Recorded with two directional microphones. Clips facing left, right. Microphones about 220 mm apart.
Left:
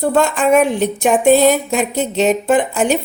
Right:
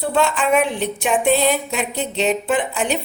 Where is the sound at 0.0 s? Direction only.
45° left (ahead or behind).